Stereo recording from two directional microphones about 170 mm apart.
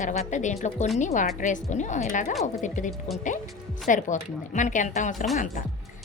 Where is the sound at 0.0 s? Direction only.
45° left (ahead or behind).